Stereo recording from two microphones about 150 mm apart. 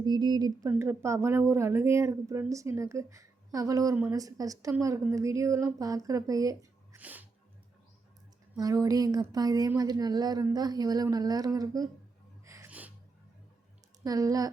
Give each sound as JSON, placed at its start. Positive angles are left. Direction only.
{"t": 0.0, "sound": "speech", "side_deg": -30}
{"t": 0.7, "sound": "a woman's voice", "side_deg": -15}
{"t": 7.0, "sound": "sneeze", "side_deg": -10}
{"t": 8.5, "sound": "speech", "side_deg": -25}
{"t": 12.5, "sound": "gasp", "side_deg": -20}
{"t": 14.0, "sound": "speech", "side_deg": -25}